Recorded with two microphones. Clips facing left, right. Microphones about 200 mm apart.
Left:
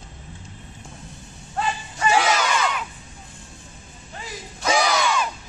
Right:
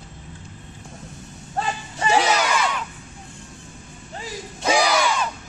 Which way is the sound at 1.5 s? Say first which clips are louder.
Even; 25° right (ahead or behind).